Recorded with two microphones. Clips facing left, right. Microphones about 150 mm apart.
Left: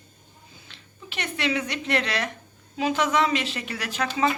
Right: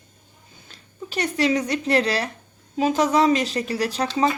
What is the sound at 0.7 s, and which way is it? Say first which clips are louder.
A woman's voice: right 9 dB; 40° right (ahead or behind).